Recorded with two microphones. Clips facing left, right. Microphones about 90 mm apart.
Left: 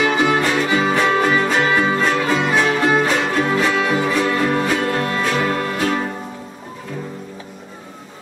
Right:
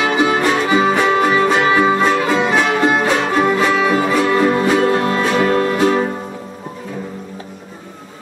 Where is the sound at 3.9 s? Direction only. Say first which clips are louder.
Right 4 dB; 20° right (ahead or behind).